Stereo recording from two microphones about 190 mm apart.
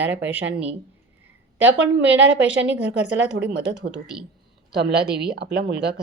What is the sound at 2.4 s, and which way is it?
Speech, 5° right (ahead or behind).